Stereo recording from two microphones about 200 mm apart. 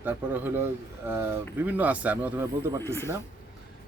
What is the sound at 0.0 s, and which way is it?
Speech, 10° right (ahead or behind).